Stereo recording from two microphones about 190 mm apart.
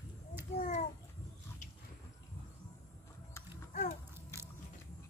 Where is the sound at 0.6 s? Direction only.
40° left (ahead or behind).